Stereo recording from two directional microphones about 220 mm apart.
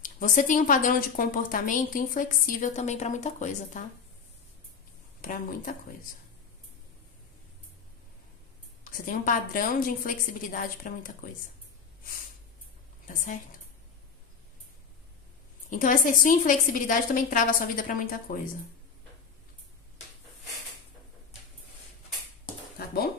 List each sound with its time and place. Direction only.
0.0 s a woman's voice: 35° left (ahead or behind)
5.2 s a woman's voice: 40° left (ahead or behind)
8.8 s a woman's voice: 40° left (ahead or behind)
13.0 s a woman's voice: 35° left (ahead or behind)
15.7 s a woman's voice: 35° left (ahead or behind)